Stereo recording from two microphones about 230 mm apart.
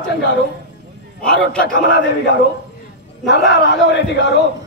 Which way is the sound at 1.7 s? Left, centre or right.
Left.